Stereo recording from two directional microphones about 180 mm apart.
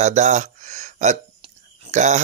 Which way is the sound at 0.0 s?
40° right (ahead or behind).